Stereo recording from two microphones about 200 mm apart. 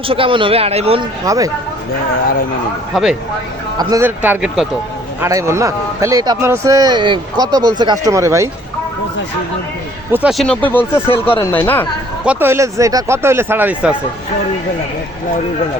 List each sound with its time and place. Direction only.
0.1 s a man's voice: 25° right (ahead or behind)
1.2 s speech: 15° right (ahead or behind)
2.9 s speech: 5° right (ahead or behind)
3.8 s speech: 15° right (ahead or behind)
10.1 s speech: 5° right (ahead or behind); by 11.9 s 10° left (ahead or behind)
12.2 s speech: 10° right (ahead or behind)